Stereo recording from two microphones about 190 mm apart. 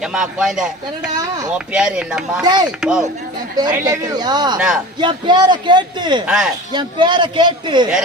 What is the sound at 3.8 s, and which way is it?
Speech, 20° right (ahead or behind).